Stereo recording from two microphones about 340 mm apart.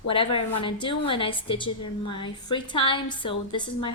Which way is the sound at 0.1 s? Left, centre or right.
Centre.